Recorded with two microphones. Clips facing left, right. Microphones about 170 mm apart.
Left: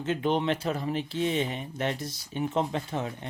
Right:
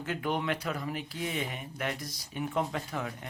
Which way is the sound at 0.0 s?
25° left (ahead or behind).